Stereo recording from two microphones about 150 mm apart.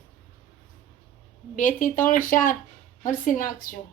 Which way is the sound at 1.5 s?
60° left (ahead or behind).